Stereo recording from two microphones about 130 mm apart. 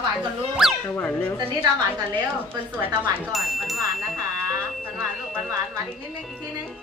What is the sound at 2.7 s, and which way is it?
Speech, 15° right (ahead or behind).